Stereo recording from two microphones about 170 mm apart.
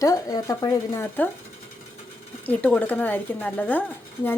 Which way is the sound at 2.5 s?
10° left (ahead or behind).